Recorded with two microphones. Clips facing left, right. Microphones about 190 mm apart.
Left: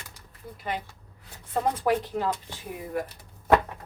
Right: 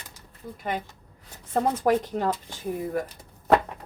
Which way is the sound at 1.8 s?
45° right (ahead or behind).